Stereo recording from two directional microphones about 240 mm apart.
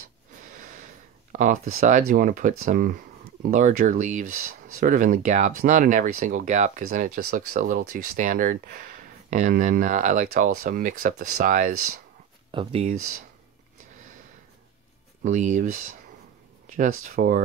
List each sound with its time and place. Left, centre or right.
0.0 s snort: right
1.3 s speech: right
12.4 s speech: right
15.2 s speech: right